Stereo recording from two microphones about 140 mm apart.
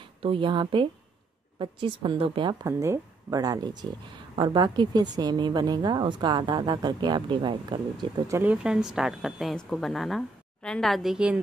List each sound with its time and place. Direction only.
0.0 s a woman's voice: 40° right (ahead or behind)
2.6 s a woman's voice: 20° right (ahead or behind)
8.3 s speech: 15° right (ahead or behind)
8.6 s speech: 5° right (ahead or behind)